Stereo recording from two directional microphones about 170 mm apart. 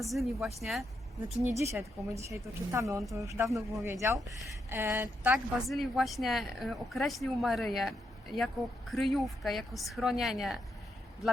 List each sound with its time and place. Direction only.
0.0 s speech: centre (ahead or behind)
1.5 s speech: 15° right (ahead or behind)
3.0 s speech: centre (ahead or behind)
3.2 s speech: 20° right (ahead or behind); by 10.6 s centre (ahead or behind)